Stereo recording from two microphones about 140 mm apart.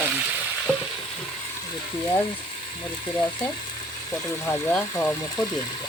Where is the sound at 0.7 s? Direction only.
5° left (ahead or behind).